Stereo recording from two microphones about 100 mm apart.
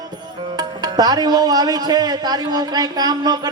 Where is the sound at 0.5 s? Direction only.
40° right (ahead or behind).